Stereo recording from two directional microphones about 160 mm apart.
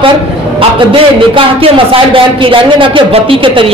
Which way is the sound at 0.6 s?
35° right (ahead or behind).